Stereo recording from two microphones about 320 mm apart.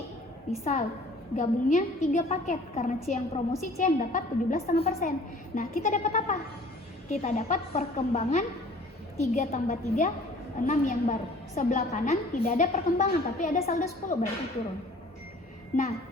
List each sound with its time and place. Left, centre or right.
0.6 s a woman's voice: left
15.7 s a woman's voice: left